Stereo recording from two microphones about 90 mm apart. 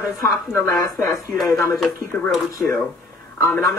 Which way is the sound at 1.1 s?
Centre (ahead or behind).